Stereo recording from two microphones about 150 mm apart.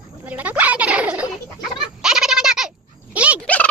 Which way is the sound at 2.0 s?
5° right (ahead or behind).